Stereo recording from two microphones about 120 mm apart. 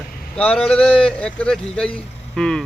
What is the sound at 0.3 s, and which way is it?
Speech, 10° left (ahead or behind).